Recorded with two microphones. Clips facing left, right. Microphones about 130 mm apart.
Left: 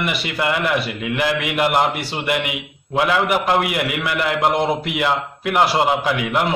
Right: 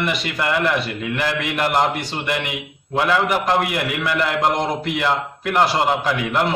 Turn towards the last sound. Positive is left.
turn(degrees=10)  # may be behind; listen again after turning